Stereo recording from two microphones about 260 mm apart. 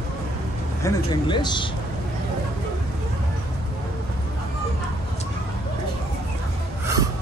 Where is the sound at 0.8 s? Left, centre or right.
Centre.